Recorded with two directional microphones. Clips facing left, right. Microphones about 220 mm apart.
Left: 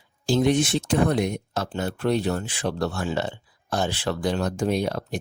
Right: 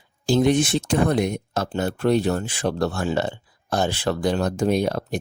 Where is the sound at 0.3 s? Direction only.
50° right (ahead or behind).